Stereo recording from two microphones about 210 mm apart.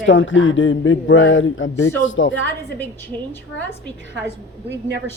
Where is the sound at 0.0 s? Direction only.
65° left (ahead or behind).